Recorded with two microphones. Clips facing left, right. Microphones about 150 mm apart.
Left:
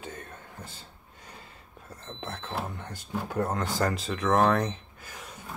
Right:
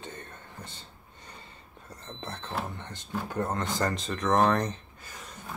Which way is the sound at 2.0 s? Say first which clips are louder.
Left 1 dB; 5° left (ahead or behind).